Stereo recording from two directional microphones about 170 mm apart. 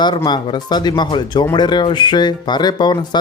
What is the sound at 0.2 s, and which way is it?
Speech, 25° left (ahead or behind).